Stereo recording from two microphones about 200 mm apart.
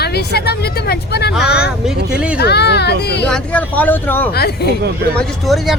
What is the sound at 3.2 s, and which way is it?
Speech, 5° left (ahead or behind).